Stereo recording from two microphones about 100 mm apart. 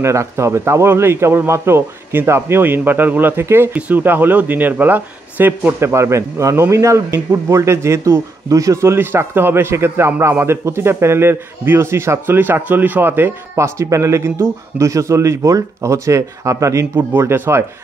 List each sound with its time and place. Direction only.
0.0 s a man's voice: 30° right (ahead or behind)
8.9 s a man's voice: 20° right (ahead or behind)